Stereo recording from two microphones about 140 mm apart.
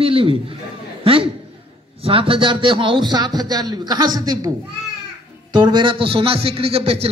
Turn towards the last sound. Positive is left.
turn(degrees=-45)  # may be behind; listen again after turning